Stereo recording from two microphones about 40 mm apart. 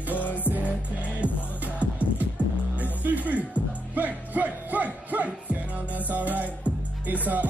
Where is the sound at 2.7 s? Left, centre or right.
Right.